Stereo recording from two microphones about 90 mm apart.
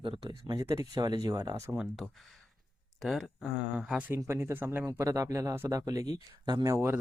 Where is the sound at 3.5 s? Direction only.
15° right (ahead or behind).